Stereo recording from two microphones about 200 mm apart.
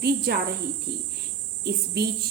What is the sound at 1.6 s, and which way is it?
Speech, 55° right (ahead or behind).